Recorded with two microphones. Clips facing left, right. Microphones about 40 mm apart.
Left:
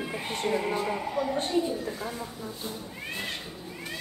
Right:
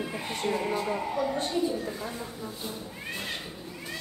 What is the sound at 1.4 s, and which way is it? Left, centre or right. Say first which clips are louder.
Speech: left 1 dB; left.